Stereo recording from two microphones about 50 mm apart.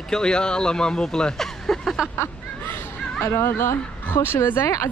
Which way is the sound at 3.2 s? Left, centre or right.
Left.